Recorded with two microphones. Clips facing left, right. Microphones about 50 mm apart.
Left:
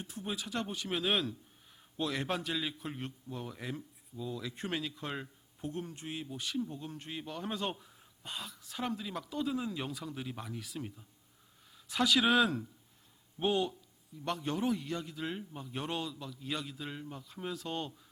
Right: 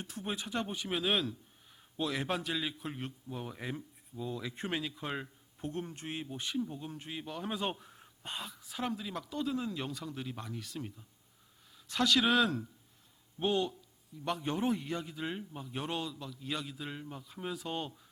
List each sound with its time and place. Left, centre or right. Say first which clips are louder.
0.4 s a man's voice: right 1 dB; centre
0.9 s a man's voice: even; centre
6.1 s speech: right 1 dB; right
6.6 s a man's voice: right 1 dB; centre
7.6 s a man's voice: right 1 dB; centre
7.9 s a sound: right 2 dB; right
8.4 s a man's voice: right 1 dB; centre
8.7 s a man's voice: even; centre
14.3 s a man's voice: right 1 dB; centre